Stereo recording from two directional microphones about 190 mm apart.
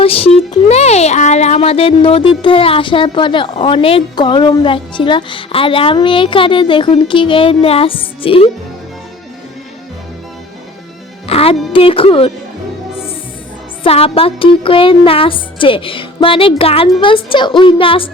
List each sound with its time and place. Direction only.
0.0 s speech: 30° left (ahead or behind)
11.3 s speech: 30° left (ahead or behind)
13.8 s speech: 30° left (ahead or behind)